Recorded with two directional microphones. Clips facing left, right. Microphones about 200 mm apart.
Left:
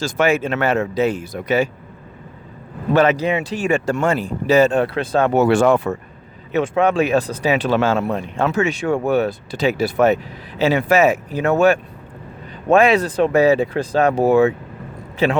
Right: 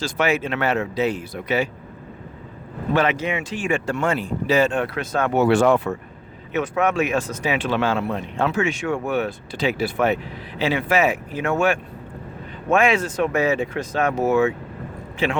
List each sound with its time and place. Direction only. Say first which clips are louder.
0.0 s speech: left 4 dB; 45° left (ahead or behind)
2.9 s speech: left 5 dB; 40° left (ahead or behind)
6.5 s speech: left 4 dB; 30° left (ahead or behind)